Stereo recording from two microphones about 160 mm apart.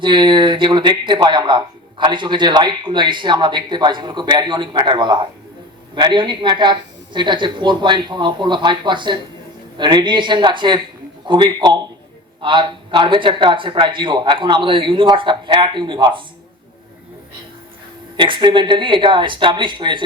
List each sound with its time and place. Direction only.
0.0 s a man's voice: 30° right (ahead or behind)
18.2 s a man's voice: 30° right (ahead or behind)